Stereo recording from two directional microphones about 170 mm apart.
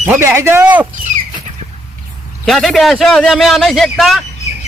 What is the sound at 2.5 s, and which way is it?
A man's voice, centre (ahead or behind).